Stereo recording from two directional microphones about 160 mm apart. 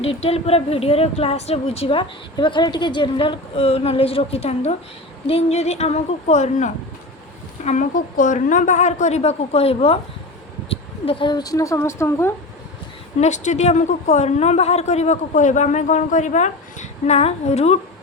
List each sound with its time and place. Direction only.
0.0 s a woman's voice: 40° left (ahead or behind); by 12.3 s 15° left (ahead or behind)
13.1 s a woman's voice: 45° left (ahead or behind)